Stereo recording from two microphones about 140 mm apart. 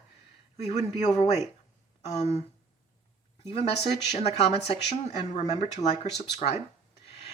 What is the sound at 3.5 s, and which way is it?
Speech, 45° left (ahead or behind).